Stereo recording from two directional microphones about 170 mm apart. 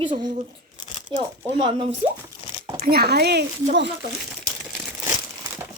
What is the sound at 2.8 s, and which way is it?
Speech, 65° right (ahead or behind).